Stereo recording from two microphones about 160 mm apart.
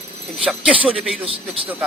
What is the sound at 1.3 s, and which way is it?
Speech, 35° right (ahead or behind).